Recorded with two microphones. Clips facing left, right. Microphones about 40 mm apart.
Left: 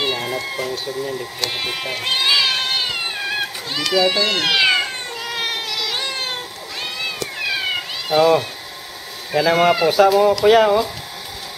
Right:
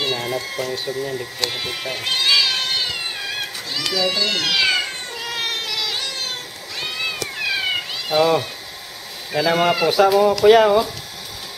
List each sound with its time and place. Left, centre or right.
0.0 s cat: centre
0.8 s speech: centre
1.5 s cat: left
3.9 s speech: left
5.2 s cat: centre
5.9 s a sound: left
6.8 s cat: centre
9.3 s speech: centre